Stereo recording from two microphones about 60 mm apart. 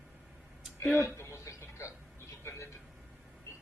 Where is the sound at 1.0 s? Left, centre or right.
Left.